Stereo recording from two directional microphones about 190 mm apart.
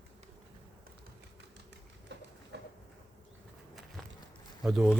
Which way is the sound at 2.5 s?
65° right (ahead or behind).